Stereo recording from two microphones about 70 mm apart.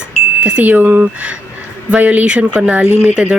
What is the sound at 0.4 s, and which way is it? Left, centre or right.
Speech, right.